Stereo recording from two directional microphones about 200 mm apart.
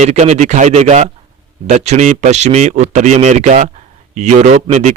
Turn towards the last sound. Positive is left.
turn(degrees=-35)  # may be behind; listen again after turning